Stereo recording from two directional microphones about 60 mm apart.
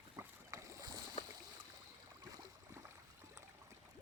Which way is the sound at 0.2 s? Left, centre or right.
Right.